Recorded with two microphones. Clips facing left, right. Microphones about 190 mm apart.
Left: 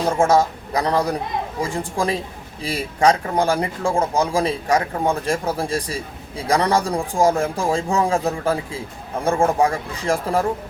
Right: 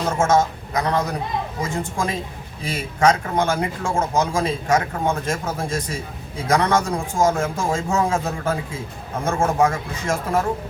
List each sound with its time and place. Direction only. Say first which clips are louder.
0.2 s a man's voice: even; 35° left (ahead or behind)